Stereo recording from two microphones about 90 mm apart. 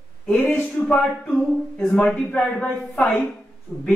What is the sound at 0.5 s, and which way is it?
Speech, 15° left (ahead or behind).